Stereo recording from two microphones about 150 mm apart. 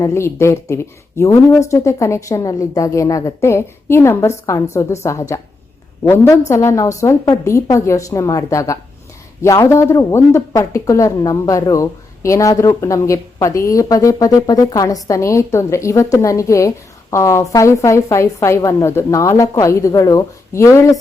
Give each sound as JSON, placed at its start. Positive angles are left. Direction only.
{"t": 0.0, "sound": "speech", "side_deg": 20}